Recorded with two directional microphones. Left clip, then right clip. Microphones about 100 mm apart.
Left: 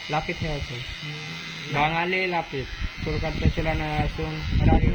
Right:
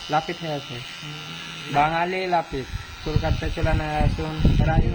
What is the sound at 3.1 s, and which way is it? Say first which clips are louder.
Speech: right 2 dB; 25° right (ahead or behind).